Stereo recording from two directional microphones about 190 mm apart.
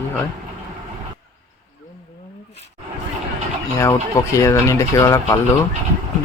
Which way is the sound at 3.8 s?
15° left (ahead or behind).